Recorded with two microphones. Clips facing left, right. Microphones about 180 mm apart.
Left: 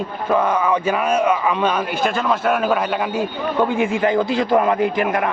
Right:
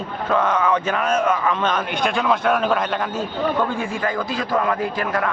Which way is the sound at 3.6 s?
20° left (ahead or behind).